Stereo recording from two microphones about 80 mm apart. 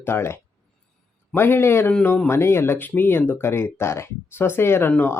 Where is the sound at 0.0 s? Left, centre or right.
Left.